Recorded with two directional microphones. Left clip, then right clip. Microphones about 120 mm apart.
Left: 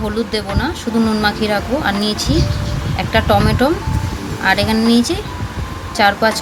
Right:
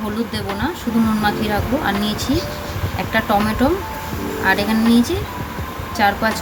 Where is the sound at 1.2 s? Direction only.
35° left (ahead or behind).